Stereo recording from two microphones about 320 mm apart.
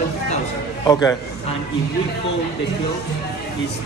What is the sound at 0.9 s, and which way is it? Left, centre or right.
Speech, centre.